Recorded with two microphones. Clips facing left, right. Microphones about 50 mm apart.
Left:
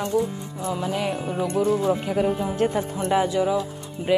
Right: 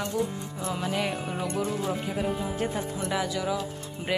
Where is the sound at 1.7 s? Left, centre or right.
Left.